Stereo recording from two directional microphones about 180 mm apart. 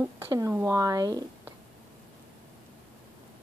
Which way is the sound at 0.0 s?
15° right (ahead or behind).